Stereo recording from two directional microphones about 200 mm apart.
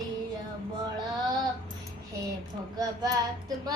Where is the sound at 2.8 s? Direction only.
20° right (ahead or behind).